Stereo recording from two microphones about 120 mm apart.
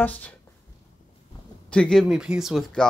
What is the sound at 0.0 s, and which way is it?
Speech, 15° left (ahead or behind).